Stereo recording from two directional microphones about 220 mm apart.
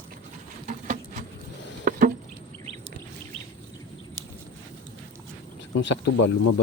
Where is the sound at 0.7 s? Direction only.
35° right (ahead or behind).